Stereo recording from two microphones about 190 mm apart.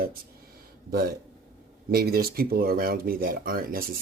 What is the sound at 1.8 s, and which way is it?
A man's voice, 55° right (ahead or behind).